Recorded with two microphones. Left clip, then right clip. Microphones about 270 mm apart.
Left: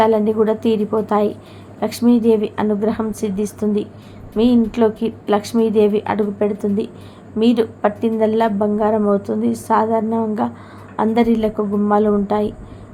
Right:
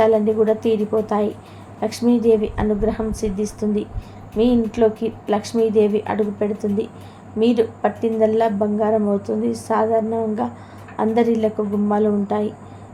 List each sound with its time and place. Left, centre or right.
0.0 s a woman's voice: centre